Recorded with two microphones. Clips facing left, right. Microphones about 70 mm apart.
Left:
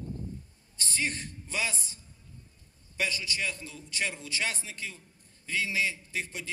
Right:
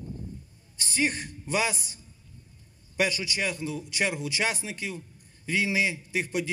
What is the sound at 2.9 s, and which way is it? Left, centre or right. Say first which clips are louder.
Speech: right 5 dB; right.